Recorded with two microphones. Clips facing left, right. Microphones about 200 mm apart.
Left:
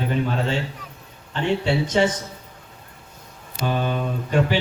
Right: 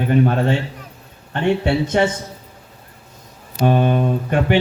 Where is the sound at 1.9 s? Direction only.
60° right (ahead or behind).